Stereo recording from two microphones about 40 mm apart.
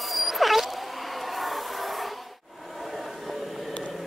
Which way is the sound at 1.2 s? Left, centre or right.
Centre.